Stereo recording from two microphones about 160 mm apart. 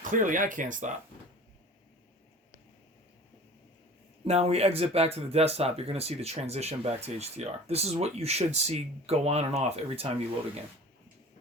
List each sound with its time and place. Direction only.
0.0 s speech: 55° right (ahead or behind)
4.3 s speech: 40° right (ahead or behind)